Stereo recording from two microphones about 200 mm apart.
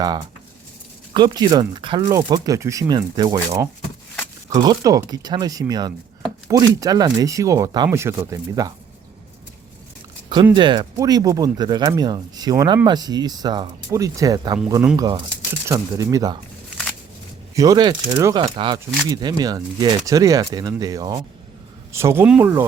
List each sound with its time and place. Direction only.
1.1 s speech: 20° right (ahead or behind)
10.5 s speech: 25° right (ahead or behind)
17.5 s speech: 15° right (ahead or behind)